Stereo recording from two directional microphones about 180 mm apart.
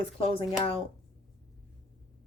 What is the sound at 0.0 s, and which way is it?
Speech, 30° left (ahead or behind).